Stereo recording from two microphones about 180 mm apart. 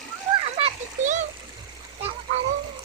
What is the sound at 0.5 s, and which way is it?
Children playing, 40° right (ahead or behind).